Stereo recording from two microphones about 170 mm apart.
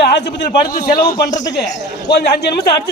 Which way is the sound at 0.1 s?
90° left.